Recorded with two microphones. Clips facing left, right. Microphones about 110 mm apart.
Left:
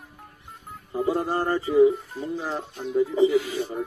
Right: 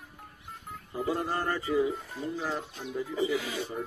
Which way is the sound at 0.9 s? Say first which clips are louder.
Left 6 dB; 25° left (ahead or behind).